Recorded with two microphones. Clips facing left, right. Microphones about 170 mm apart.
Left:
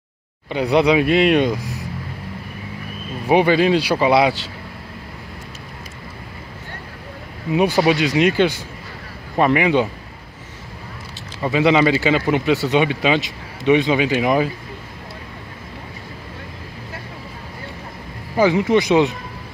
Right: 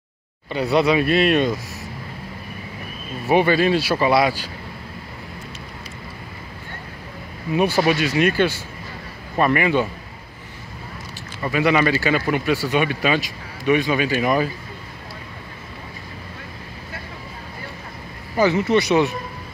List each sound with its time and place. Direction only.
0.5 s speech: 15° left (ahead or behind)
3.3 s speech: 15° left (ahead or behind)
7.5 s speech: 15° left (ahead or behind)
11.4 s speech: 20° left (ahead or behind)
18.3 s speech: 15° left (ahead or behind)